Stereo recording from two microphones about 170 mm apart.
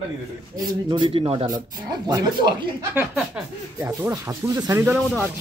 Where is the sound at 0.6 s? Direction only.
25° right (ahead or behind).